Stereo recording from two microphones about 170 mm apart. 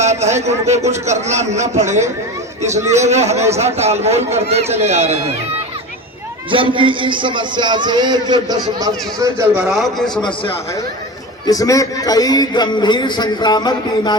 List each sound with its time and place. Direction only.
0.0 s a man's voice: 40° right (ahead or behind)
6.5 s a man's voice: 30° right (ahead or behind)
9.6 s a man's voice: centre (ahead or behind)
11.4 s a man's voice: 20° left (ahead or behind)